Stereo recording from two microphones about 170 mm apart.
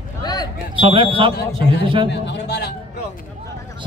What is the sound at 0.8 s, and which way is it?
A man's voice, 30° right (ahead or behind).